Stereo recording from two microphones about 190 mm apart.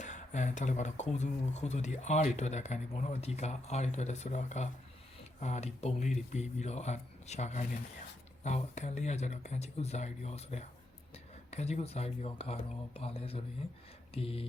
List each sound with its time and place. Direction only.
0.0 s speech: 40° left (ahead or behind)